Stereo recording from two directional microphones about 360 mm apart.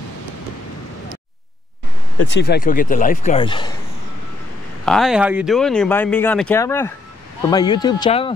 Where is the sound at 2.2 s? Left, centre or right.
Left; by 3.7 s centre.